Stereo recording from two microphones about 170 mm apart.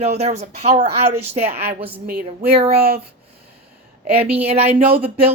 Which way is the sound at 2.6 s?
65° right (ahead or behind).